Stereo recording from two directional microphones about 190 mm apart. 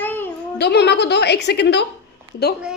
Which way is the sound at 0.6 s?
60° left (ahead or behind).